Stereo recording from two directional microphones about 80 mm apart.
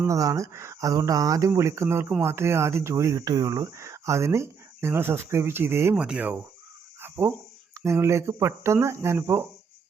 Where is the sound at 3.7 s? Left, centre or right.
Right.